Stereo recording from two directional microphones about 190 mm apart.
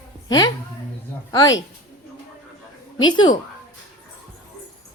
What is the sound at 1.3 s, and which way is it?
Speech, 20° left (ahead or behind).